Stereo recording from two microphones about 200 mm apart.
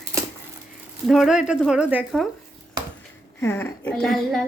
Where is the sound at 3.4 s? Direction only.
10° left (ahead or behind).